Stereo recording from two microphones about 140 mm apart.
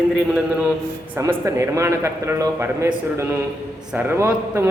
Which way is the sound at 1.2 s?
20° right (ahead or behind).